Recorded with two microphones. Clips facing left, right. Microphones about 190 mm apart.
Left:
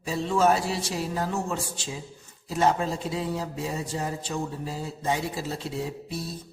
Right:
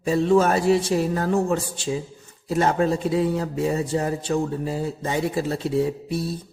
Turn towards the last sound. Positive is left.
turn(degrees=-60)  # may be behind; listen again after turning